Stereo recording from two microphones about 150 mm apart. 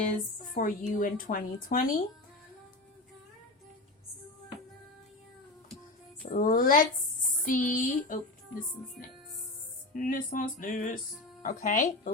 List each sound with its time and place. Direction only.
0.0 s a woman's voice: 60° left (ahead or behind)
6.3 s a woman's voice: 65° left (ahead or behind)